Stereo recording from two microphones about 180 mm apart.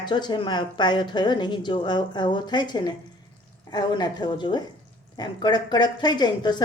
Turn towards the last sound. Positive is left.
turn(degrees=25)  # may be behind; listen again after turning